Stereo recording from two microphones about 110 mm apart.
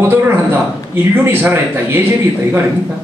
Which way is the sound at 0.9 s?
20° right (ahead or behind).